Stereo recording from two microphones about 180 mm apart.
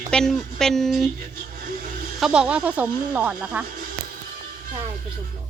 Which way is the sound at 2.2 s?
5° right (ahead or behind).